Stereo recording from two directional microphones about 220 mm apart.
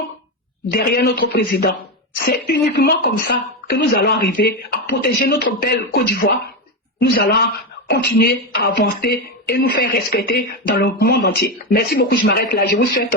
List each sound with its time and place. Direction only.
0.7 s speech: 50° left (ahead or behind)